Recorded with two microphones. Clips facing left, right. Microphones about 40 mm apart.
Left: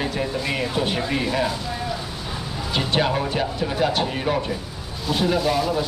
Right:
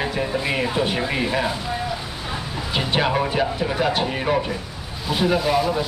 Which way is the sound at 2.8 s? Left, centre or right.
Centre.